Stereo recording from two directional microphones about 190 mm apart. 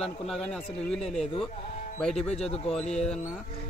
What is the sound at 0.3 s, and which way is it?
Speech, 5° left (ahead or behind).